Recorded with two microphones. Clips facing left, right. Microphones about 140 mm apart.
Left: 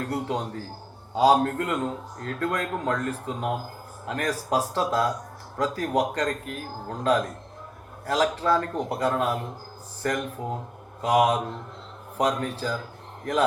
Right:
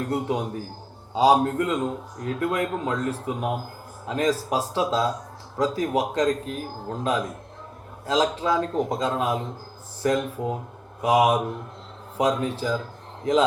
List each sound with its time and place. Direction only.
0.0 s speech: 15° right (ahead or behind)